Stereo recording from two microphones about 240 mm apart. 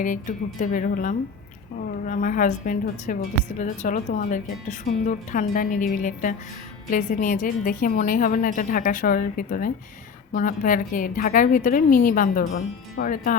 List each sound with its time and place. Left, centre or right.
0.0 s a woman's voice: left